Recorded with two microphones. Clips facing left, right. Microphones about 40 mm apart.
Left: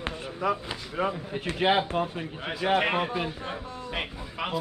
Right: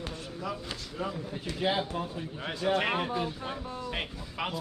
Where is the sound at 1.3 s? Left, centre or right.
Left.